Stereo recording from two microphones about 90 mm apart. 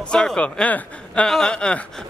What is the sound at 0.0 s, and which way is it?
Speech, 10° left (ahead or behind).